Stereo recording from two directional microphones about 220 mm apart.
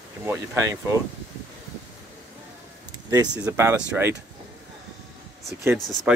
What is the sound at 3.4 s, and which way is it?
Speech, 10° right (ahead or behind).